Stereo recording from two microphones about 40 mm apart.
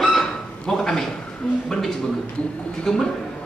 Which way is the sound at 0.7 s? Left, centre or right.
Centre.